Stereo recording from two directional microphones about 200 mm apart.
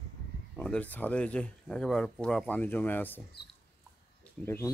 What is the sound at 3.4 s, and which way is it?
Rodents, 55° left (ahead or behind).